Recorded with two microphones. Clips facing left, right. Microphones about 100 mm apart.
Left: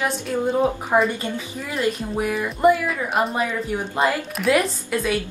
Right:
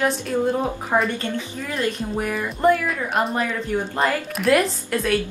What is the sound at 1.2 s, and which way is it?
Speech, 15° left (ahead or behind).